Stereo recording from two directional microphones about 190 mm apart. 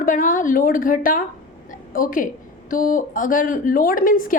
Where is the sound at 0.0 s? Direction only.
45° left (ahead or behind).